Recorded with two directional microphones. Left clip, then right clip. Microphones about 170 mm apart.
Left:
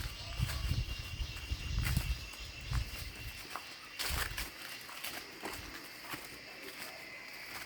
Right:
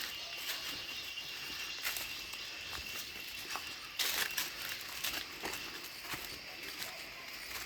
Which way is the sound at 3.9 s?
15° right (ahead or behind).